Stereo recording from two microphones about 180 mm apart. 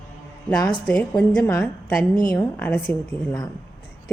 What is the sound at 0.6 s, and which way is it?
Speech, 25° left (ahead or behind).